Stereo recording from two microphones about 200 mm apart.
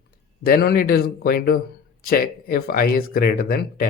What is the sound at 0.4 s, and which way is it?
A man's voice, 50° left (ahead or behind).